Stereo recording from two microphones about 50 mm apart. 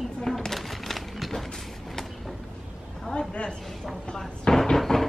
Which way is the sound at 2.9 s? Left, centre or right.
Centre.